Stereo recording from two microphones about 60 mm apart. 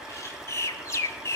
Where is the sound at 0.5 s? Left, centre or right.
Left.